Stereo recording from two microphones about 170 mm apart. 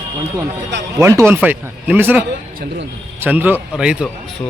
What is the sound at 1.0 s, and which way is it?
A man's voice, 15° right (ahead or behind).